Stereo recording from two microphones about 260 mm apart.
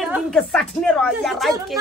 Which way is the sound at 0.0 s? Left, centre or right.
Centre.